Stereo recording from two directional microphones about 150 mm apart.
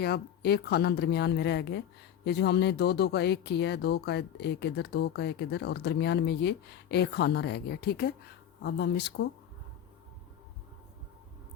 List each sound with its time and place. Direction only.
0.0 s speech: 90° left
9.2 s speech: 90° left